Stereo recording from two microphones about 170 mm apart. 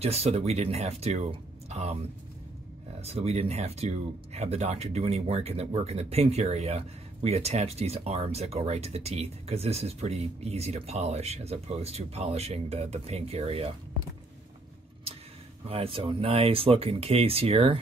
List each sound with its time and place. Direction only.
0.0 s speech: 35° right (ahead or behind)
15.7 s speech: 35° right (ahead or behind)